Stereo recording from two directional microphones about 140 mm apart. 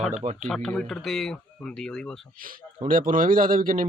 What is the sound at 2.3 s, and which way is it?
Speech, 90° right.